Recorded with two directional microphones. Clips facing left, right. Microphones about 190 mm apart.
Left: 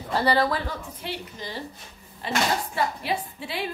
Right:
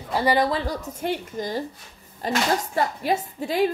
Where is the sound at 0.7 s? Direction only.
45° right (ahead or behind).